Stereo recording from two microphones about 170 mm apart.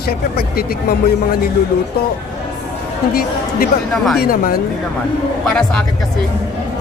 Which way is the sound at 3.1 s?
60° left (ahead or behind).